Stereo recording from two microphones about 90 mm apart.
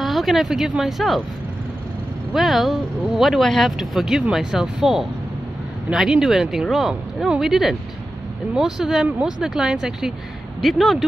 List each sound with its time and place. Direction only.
0.0 s speech: centre (ahead or behind)
2.3 s speech: centre (ahead or behind)